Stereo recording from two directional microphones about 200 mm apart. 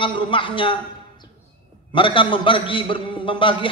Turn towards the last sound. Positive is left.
turn(degrees=25)  # may be behind; listen again after turning